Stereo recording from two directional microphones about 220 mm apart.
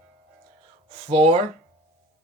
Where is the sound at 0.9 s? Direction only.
25° right (ahead or behind).